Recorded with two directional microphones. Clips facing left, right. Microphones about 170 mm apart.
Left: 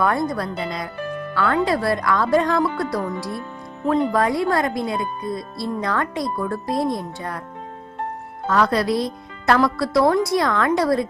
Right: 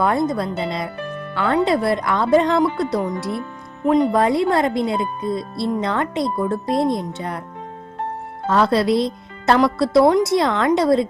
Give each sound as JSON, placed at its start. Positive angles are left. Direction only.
{"t": 0.0, "sound": "speech", "side_deg": -20}
{"t": 8.4, "sound": "speech", "side_deg": -25}